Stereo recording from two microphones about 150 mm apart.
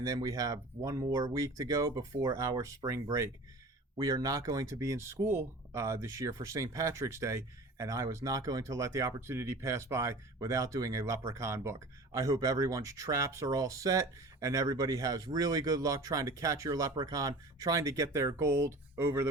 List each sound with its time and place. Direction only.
0.0 s speech: 25° right (ahead or behind)